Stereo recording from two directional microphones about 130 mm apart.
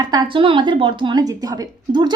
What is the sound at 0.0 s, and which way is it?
Speech, 30° right (ahead or behind).